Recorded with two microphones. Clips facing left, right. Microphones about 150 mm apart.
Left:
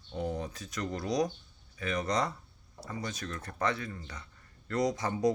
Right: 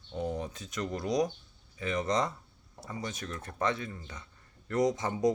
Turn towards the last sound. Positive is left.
turn(degrees=-20)  # may be behind; listen again after turning